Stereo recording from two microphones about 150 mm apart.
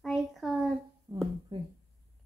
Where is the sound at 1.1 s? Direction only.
25° right (ahead or behind).